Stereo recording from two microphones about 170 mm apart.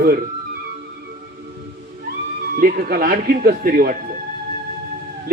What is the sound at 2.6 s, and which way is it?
Speech, 60° right (ahead or behind).